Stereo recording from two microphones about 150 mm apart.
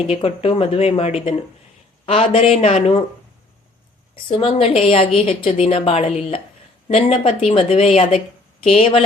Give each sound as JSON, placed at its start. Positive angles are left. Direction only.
{"t": 0.1, "sound": "a woman's voice", "side_deg": 40}
{"t": 4.1, "sound": "a woman's voice", "side_deg": 35}